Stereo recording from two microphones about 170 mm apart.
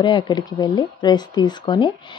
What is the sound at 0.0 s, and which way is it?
Speech, 25° left (ahead or behind).